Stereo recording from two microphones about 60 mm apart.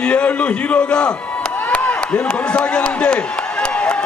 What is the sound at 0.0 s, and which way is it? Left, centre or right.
A man's voice, centre.